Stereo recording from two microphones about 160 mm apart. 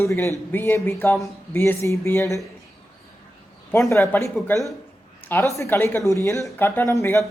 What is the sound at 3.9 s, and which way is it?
Speech, 15° left (ahead or behind).